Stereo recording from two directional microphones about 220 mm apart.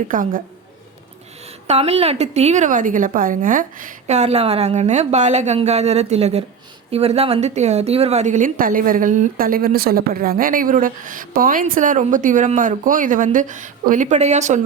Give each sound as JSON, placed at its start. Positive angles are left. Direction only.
{"t": 0.1, "sound": "a woman's voice", "side_deg": -40}
{"t": 1.6, "sound": "a woman's voice", "side_deg": -30}